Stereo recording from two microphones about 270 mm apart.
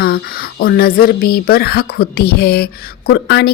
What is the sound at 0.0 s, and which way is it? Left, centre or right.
A woman's voice, left.